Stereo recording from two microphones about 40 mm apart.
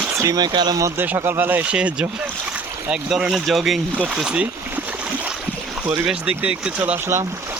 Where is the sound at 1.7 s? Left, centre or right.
Right.